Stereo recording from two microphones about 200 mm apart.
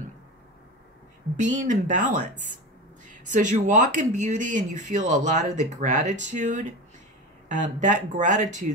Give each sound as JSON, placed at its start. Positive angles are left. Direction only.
{"t": 1.3, "sound": "speech", "side_deg": -40}